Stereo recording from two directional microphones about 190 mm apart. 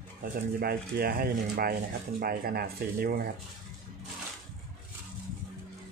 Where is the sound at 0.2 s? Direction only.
50° right (ahead or behind).